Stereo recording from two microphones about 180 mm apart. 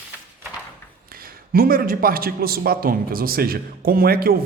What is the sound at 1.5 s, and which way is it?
Speech, 55° right (ahead or behind).